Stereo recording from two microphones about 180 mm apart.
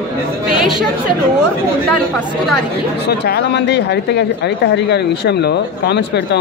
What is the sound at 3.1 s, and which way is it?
Speech, 60° left (ahead or behind).